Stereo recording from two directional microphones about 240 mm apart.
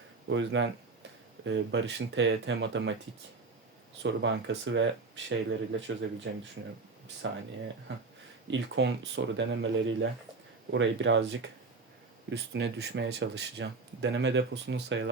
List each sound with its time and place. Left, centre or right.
0.3 s speech: right
4.0 s speech: right
7.2 s speech: right
8.4 s speech: right